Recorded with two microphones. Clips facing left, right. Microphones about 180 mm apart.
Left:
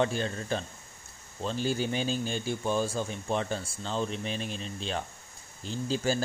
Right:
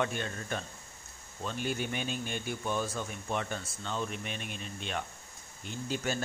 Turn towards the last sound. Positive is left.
turn(degrees=30)  # may be behind; listen again after turning